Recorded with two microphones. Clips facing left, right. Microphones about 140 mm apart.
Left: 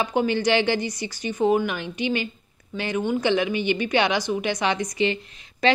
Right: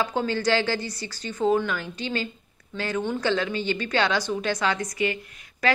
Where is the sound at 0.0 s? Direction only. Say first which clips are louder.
Left 3 dB; 15° left (ahead or behind).